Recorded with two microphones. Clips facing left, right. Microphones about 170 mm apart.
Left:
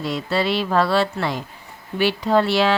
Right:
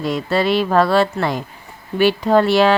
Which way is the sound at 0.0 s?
50° right (ahead or behind).